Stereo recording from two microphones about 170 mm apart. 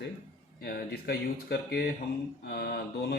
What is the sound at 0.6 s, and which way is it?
Speech, 65° left (ahead or behind).